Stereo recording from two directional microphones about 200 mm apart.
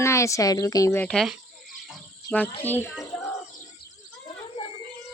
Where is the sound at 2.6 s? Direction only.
10° left (ahead or behind).